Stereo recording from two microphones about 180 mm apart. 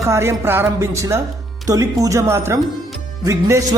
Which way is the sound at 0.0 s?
15° right (ahead or behind).